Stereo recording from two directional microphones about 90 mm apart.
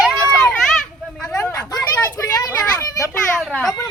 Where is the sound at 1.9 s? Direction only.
25° left (ahead or behind).